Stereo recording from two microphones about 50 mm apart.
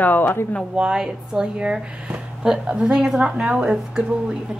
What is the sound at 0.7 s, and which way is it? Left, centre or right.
Speech, centre.